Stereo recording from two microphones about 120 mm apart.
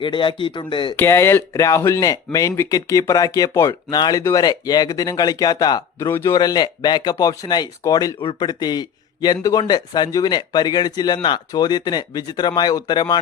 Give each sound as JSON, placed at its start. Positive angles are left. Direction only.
{"t": 0.0, "sound": "speech", "side_deg": 45}
{"t": 0.9, "sound": "a man's voice", "side_deg": 20}
{"t": 6.1, "sound": "speech", "side_deg": 20}
{"t": 6.3, "sound": "a man's voice", "side_deg": 35}
{"t": 8.2, "sound": "speech", "side_deg": 45}
{"t": 8.4, "sound": "a man's voice", "side_deg": 35}